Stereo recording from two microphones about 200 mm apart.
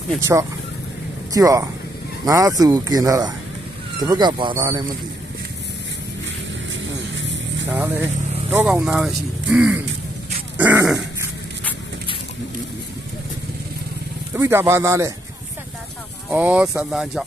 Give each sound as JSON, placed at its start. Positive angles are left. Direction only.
{"t": 0.3, "sound": "a man's voice", "side_deg": -10}
{"t": 6.7, "sound": "vehicle", "side_deg": -65}
{"t": 7.6, "sound": "speech", "side_deg": -10}
{"t": 14.3, "sound": "speech", "side_deg": -10}
{"t": 16.3, "sound": "speech", "side_deg": -5}